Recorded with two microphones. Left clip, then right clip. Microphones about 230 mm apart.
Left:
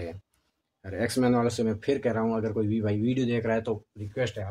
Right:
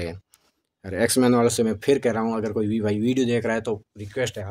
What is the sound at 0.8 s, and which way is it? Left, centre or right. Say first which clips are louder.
Speech: right 6 dB; right.